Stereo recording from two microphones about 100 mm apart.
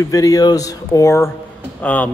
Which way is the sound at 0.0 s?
35° left (ahead or behind).